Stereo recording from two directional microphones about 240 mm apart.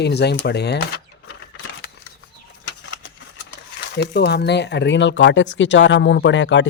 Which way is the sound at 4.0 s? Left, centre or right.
Left.